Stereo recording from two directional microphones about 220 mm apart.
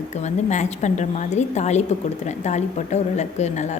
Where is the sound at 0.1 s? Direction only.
30° left (ahead or behind).